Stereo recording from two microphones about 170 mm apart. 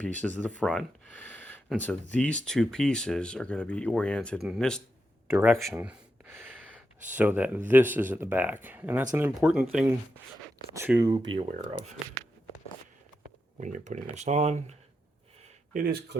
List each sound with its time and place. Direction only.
0.0 s speech: 10° left (ahead or behind)
5.3 s speech: 15° right (ahead or behind)
5.6 s gasp: 10° right (ahead or behind)
7.1 s speech: 10° right (ahead or behind)
11.3 s speech: 40° right (ahead or behind)
13.2 s speech: 45° right (ahead or behind)
15.7 s speech: 60° right (ahead or behind)